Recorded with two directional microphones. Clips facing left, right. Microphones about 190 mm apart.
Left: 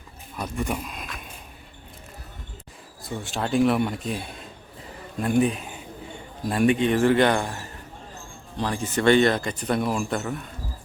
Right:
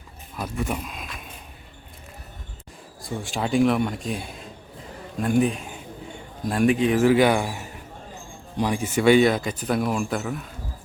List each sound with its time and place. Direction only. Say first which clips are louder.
0.3 s speech: even; centre (ahead or behind)
3.2 s a man's voice: right 1 dB; centre (ahead or behind)